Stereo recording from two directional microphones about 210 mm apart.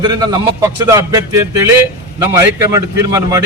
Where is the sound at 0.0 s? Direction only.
20° right (ahead or behind).